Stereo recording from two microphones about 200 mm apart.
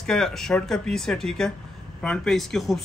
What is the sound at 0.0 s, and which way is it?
Speech, centre (ahead or behind).